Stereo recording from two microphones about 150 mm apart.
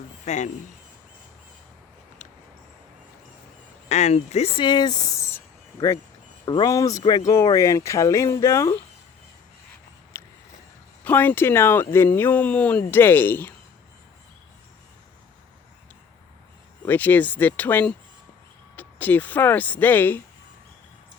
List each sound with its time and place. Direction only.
0.3 s speech: 50° left (ahead or behind)
3.8 s speech: 50° left (ahead or behind)
4.6 s speech: 30° left (ahead or behind)
6.4 s speech: 30° left (ahead or behind)
10.1 s a sound: 15° left (ahead or behind)
11.0 s speech: 10° left (ahead or behind)
16.8 s speech: 10° left (ahead or behind)